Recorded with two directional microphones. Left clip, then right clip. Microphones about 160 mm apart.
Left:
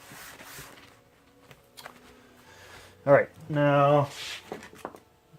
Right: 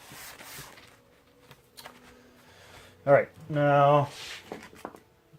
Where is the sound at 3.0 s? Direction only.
30° left (ahead or behind).